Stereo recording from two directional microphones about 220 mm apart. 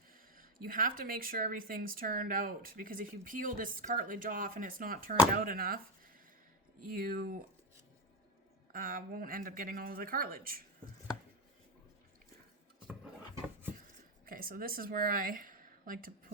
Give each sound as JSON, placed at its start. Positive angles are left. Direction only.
{"t": 0.3, "sound": "speech", "side_deg": -40}
{"t": 6.8, "sound": "speech", "side_deg": -40}
{"t": 8.7, "sound": "speech", "side_deg": -40}
{"t": 14.3, "sound": "a woman's voice", "side_deg": -40}